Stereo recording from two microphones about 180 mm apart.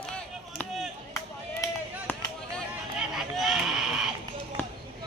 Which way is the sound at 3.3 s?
Centre (ahead or behind).